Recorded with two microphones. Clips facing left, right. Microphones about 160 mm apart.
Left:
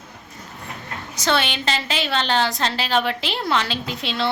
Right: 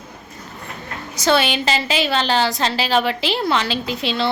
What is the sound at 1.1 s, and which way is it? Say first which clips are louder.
A woman's voice: right 5 dB; 10° right (ahead or behind).